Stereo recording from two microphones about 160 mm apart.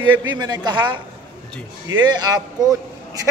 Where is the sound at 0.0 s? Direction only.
30° right (ahead or behind).